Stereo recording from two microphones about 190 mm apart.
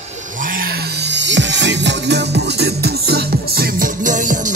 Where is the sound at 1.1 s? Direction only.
70° right (ahead or behind); by 4.3 s 45° right (ahead or behind).